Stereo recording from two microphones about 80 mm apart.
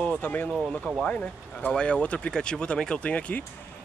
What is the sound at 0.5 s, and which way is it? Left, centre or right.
Speech, centre.